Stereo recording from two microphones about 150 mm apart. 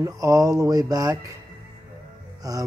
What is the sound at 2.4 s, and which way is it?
Music, 25° right (ahead or behind).